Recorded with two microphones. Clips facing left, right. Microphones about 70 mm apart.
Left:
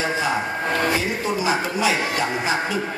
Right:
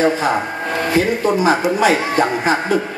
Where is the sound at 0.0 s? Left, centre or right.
Right.